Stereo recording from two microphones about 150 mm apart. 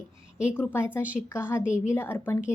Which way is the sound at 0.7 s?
15° left (ahead or behind).